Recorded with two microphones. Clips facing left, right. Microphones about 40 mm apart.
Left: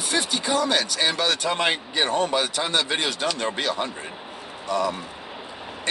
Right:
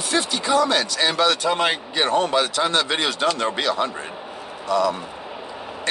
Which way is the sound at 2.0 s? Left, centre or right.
Right.